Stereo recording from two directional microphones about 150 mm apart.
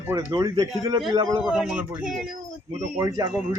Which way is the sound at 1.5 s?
5° right (ahead or behind).